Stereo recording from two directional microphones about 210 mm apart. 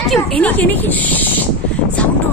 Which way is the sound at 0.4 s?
10° left (ahead or behind).